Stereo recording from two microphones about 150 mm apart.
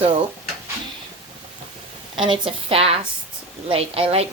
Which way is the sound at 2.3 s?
40° right (ahead or behind).